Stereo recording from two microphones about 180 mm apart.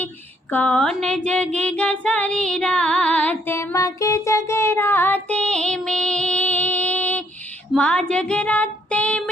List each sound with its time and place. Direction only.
0.5 s speech: 5° left (ahead or behind)
1.5 s female singing: 5° left (ahead or behind)